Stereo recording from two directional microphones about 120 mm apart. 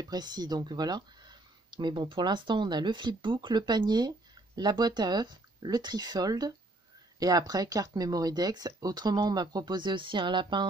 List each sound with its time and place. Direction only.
0.0 s speech: 35° right (ahead or behind)